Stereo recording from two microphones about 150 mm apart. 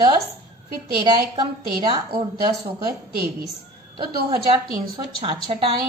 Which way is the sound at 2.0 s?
90° right.